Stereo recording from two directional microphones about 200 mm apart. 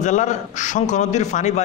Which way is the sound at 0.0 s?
35° left (ahead or behind).